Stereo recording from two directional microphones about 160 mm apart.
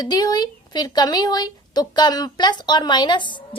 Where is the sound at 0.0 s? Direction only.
25° left (ahead or behind).